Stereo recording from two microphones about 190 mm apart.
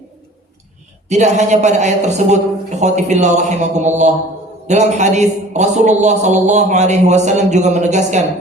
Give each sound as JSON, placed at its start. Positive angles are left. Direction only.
{"t": 1.0, "sound": "a man's voice", "side_deg": -35}